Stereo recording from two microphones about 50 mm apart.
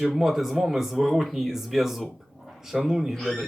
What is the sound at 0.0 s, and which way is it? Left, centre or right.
Speech, centre.